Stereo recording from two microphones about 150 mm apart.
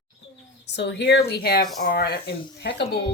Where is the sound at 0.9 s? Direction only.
90° left.